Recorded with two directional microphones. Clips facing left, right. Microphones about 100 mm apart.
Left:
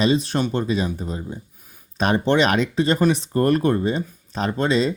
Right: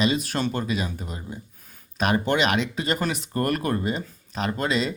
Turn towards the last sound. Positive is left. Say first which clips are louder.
# left 5 dB
turn(degrees=30)  # may be behind; listen again after turning